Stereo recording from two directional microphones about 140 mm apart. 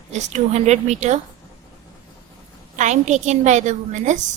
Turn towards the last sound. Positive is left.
turn(degrees=-60)  # may be behind; listen again after turning